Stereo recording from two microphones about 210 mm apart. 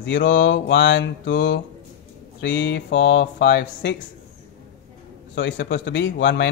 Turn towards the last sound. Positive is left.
turn(degrees=55)  # may be behind; listen again after turning